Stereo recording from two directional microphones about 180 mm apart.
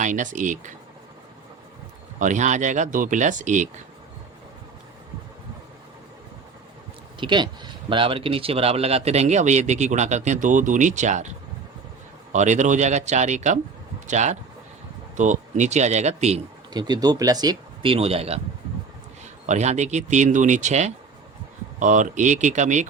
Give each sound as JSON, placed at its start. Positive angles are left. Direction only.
{"t": 0.0, "sound": "speech", "side_deg": -45}
{"t": 2.1, "sound": "speech", "side_deg": -45}
{"t": 7.2, "sound": "speech", "side_deg": -25}
{"t": 12.3, "sound": "speech", "side_deg": -40}
{"t": 16.7, "sound": "speech", "side_deg": -20}